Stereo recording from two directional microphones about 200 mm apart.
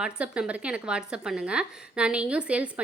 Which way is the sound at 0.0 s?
5° right (ahead or behind).